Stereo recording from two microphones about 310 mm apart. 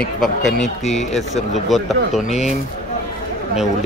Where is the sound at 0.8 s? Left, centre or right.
Left.